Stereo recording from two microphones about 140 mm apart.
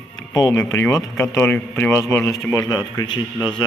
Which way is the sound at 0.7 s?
20° left (ahead or behind).